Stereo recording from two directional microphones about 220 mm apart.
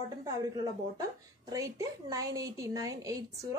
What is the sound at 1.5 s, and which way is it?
Speech, 15° right (ahead or behind).